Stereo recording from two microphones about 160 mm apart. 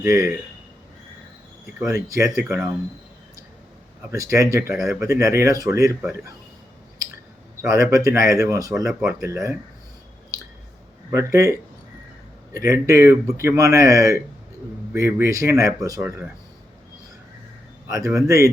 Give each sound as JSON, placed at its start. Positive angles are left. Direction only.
{"t": 0.0, "sound": "speech", "side_deg": -15}
{"t": 2.0, "sound": "speech", "side_deg": -20}
{"t": 2.4, "sound": "speech", "side_deg": -10}
{"t": 4.1, "sound": "speech", "side_deg": -20}
{"t": 4.7, "sound": "speech", "side_deg": 0}
{"t": 4.9, "sound": "speech", "side_deg": -20}
{"t": 7.6, "sound": "speech", "side_deg": -20}
{"t": 11.1, "sound": "speech", "side_deg": -20}
{"t": 12.5, "sound": "speech", "side_deg": -20}
{"t": 17.8, "sound": "speech", "side_deg": -20}